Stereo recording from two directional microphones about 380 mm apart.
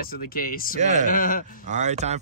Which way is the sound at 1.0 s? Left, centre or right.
Left.